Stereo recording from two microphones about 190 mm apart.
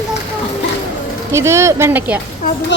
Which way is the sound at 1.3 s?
15° right (ahead or behind).